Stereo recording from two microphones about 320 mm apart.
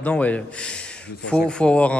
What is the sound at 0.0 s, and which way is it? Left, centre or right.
Speech, centre.